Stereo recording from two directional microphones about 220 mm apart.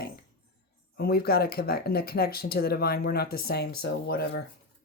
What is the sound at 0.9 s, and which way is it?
Speech, 45° left (ahead or behind).